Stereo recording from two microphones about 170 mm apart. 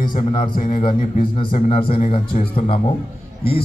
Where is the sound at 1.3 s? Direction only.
30° left (ahead or behind).